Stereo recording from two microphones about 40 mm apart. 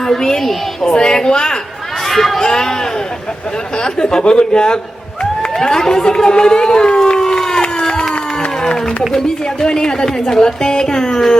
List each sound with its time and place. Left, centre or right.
0.1 s a woman's voice: centre
2.0 s a woman's voice: centre
3.8 s speech: centre
5.5 s a sound: centre
9.1 s a woman's voice: centre